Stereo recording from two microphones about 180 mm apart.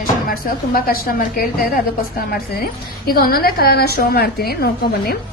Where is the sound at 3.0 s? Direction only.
55° left (ahead or behind).